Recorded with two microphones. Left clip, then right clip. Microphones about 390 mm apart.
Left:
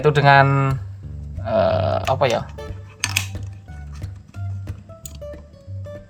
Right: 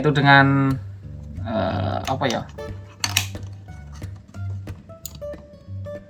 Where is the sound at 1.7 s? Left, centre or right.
Left.